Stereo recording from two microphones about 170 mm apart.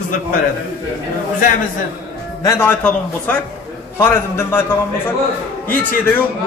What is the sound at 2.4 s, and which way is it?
A man's voice, 15° left (ahead or behind).